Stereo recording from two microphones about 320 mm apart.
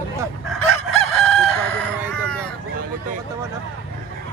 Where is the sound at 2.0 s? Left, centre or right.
Centre.